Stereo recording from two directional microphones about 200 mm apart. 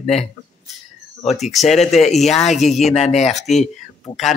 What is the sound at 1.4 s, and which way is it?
A man's voice, centre (ahead or behind).